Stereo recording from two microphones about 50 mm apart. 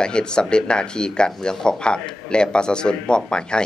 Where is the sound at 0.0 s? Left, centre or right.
Centre.